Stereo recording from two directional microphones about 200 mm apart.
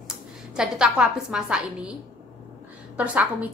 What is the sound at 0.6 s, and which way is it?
A woman's voice, 5° right (ahead or behind).